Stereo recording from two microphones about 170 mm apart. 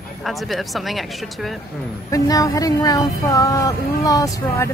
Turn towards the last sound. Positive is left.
turn(degrees=15)  # may be behind; listen again after turning